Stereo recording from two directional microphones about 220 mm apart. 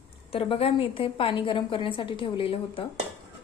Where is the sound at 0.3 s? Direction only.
25° left (ahead or behind).